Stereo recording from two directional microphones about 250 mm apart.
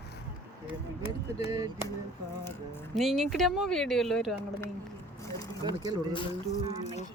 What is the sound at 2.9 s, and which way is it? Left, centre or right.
Speech, centre.